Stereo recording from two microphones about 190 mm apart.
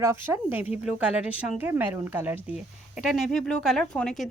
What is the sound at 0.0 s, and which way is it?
A woman's voice, 10° right (ahead or behind).